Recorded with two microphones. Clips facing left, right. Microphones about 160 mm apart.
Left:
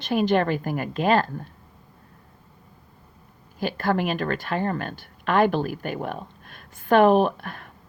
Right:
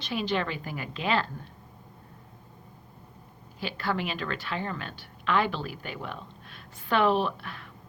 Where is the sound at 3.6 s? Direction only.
50° left (ahead or behind).